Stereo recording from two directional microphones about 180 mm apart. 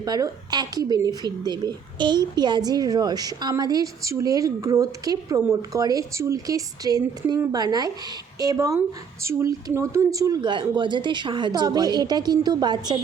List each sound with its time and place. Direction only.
0.0 s speech: 20° right (ahead or behind)